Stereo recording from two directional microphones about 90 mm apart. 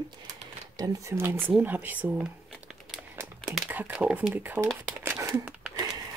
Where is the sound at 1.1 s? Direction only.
25° right (ahead or behind).